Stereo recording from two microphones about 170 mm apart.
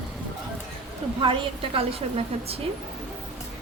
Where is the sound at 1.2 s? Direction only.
30° right (ahead or behind).